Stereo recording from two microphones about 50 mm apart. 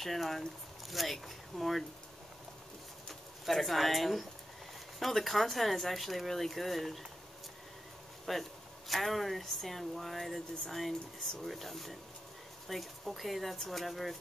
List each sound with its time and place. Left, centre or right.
0.0 s speech: centre
3.1 s speech: centre
8.3 s speech: centre